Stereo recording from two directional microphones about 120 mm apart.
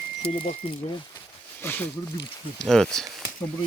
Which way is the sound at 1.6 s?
15° left (ahead or behind).